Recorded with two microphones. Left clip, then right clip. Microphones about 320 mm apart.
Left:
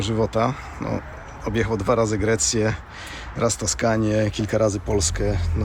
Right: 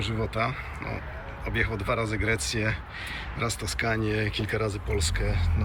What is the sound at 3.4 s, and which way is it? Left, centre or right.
Speech, centre.